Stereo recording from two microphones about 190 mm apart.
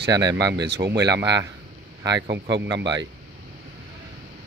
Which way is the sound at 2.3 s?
65° right (ahead or behind).